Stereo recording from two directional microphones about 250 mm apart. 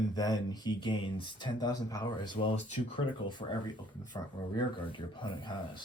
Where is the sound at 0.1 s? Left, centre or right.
Centre.